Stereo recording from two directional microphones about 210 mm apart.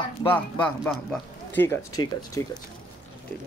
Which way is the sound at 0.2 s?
5° left (ahead or behind).